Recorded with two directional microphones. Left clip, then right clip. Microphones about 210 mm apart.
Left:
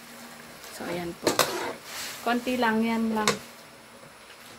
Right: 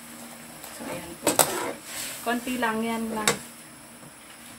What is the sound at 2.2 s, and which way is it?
Speech, 55° left (ahead or behind).